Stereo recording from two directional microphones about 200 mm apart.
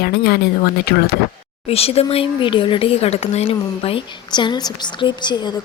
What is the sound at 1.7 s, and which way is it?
Speech, 30° left (ahead or behind).